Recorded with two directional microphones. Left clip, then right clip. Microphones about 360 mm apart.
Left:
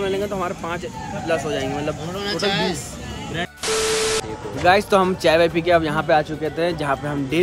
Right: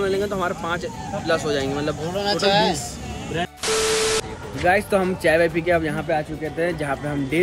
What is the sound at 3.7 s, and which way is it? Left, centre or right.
Speech, centre.